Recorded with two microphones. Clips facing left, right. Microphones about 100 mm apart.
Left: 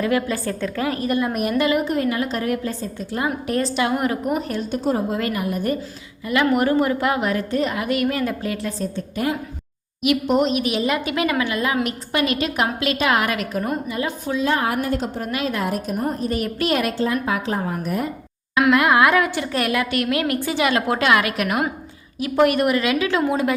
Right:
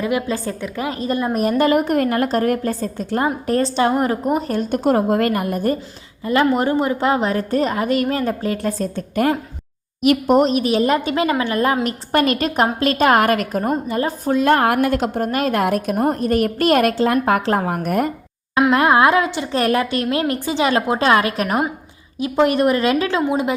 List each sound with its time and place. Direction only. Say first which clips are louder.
0.0 s a woman's voice: even; 20° right (ahead or behind); by 3.2 s 50° right (ahead or behind)
3.2 s a woman's voice: right 2 dB; 35° right (ahead or behind)
4.5 s a woman's voice: right 5 dB; 55° right (ahead or behind)
6.2 s a woman's voice: right 2 dB; 30° right (ahead or behind)
8.5 s a woman's voice: right 4 dB; 50° right (ahead or behind); by 15.1 s 75° right (ahead or behind)
15.1 s a woman's voice: right 5 dB; 45° right (ahead or behind)
15.6 s a woman's voice: right 5 dB; 65° right (ahead or behind); by 16.9 s 45° right (ahead or behind)
17.5 s a woman's voice: right 5 dB; 65° right (ahead or behind)
18.5 s a woman's voice: right 2 dB; 30° right (ahead or behind)
23.3 s a woman's voice: right 1 dB; 20° right (ahead or behind)